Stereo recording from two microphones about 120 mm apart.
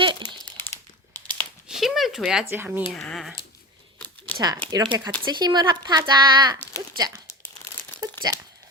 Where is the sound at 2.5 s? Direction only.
15° right (ahead or behind).